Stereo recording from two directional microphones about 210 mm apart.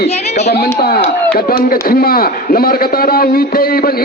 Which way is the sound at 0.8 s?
45° left (ahead or behind).